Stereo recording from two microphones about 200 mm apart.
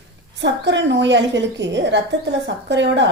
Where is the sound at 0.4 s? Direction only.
65° right (ahead or behind).